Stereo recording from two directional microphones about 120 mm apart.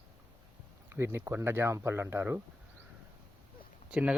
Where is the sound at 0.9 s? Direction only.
20° right (ahead or behind).